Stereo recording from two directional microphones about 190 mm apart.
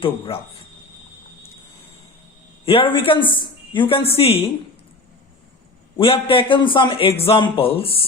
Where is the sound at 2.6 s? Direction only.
30° left (ahead or behind).